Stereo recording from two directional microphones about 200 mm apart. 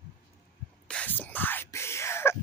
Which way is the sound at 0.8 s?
5° left (ahead or behind).